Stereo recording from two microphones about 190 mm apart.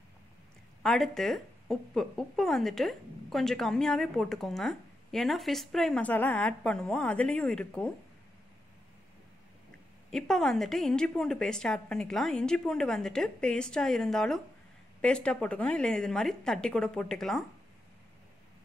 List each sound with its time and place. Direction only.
0.8 s speech: centre (ahead or behind)
10.1 s speech: centre (ahead or behind)